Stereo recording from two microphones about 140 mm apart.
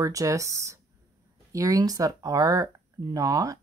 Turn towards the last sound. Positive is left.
turn(degrees=-25)  # may be behind; listen again after turning